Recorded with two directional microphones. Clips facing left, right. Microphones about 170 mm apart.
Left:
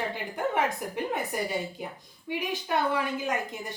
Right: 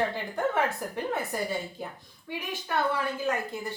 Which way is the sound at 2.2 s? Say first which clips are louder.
Left 4 dB; 15° left (ahead or behind).